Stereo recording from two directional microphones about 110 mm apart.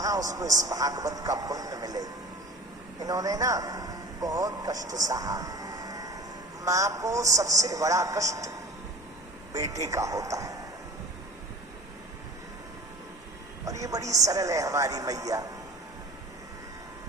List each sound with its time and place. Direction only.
0.0 s a man's voice: 30° right (ahead or behind)
13.8 s a man's voice: 30° right (ahead or behind)